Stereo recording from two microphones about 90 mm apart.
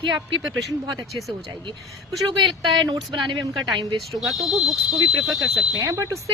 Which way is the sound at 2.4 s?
60° right (ahead or behind).